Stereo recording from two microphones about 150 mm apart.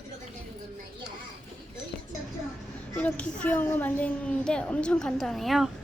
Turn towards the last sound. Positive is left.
turn(degrees=0)  # may be behind; listen again after turning